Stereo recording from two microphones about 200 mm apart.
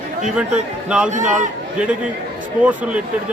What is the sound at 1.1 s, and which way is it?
Speech, 40° right (ahead or behind).